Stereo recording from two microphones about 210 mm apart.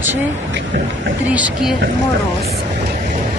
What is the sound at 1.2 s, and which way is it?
Speech, 5° right (ahead or behind).